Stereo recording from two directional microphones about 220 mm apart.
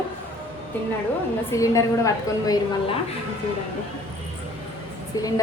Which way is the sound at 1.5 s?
15° left (ahead or behind).